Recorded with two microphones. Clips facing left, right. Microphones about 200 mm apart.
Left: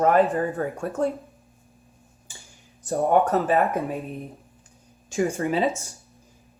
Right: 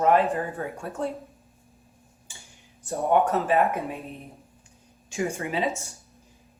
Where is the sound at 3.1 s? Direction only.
50° left (ahead or behind).